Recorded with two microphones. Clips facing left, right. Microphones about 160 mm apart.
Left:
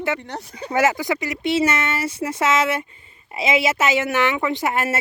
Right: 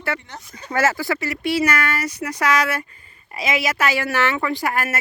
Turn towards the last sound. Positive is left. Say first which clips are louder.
# left 1 dB
turn(degrees=25)  # may be behind; listen again after turning